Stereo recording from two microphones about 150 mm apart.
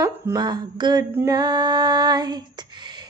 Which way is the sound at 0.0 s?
25° right (ahead or behind).